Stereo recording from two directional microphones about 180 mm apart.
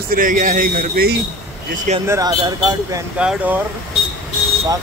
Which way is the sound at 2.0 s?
20° right (ahead or behind).